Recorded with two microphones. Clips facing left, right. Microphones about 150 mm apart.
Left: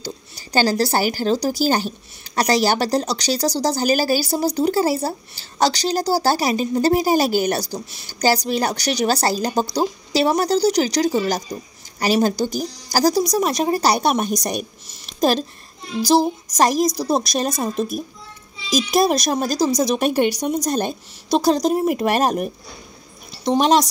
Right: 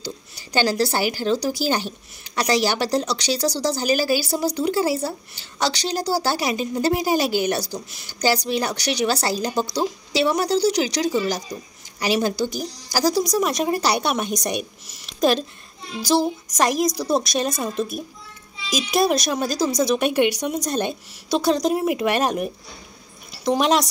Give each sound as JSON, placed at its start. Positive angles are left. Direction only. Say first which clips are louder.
{"t": 0.0, "sound": "a woman's voice", "louder": "left 1 dB", "side_deg": 40}